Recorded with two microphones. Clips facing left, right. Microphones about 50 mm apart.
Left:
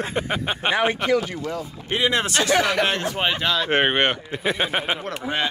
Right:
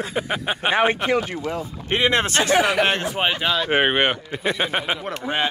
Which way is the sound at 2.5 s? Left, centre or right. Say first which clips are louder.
Right 2 dB; centre.